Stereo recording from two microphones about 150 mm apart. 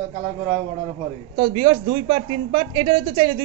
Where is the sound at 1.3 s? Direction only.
35° right (ahead or behind).